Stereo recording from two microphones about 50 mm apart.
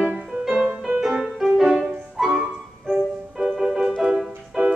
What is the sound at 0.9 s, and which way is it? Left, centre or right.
Music, centre.